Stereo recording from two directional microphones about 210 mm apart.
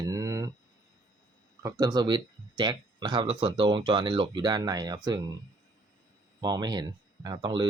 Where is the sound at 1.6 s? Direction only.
20° right (ahead or behind).